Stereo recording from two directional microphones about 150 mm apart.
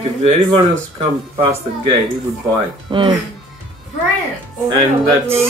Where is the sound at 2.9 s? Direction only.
35° right (ahead or behind).